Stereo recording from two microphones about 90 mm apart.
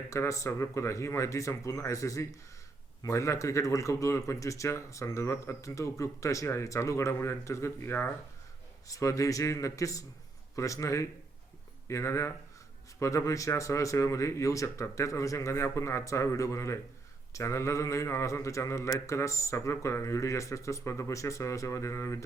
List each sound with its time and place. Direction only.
0.1 s speech: 35° left (ahead or behind)
8.9 s speech: 35° left (ahead or behind)